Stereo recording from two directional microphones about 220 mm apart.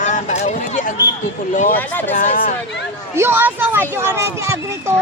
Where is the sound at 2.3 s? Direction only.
40° left (ahead or behind).